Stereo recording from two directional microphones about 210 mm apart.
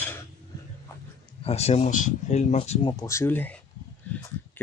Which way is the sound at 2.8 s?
15° left (ahead or behind).